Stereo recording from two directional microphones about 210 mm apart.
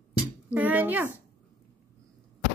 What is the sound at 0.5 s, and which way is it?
Speech, 10° right (ahead or behind).